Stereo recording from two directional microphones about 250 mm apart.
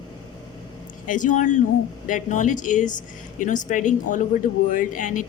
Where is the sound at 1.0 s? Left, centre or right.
Left.